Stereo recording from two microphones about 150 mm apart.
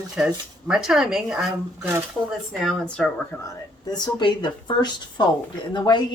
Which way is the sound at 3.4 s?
25° left (ahead or behind).